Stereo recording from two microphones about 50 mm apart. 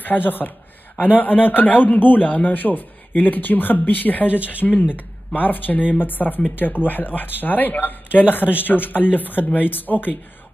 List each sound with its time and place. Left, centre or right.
0.0 s speech: left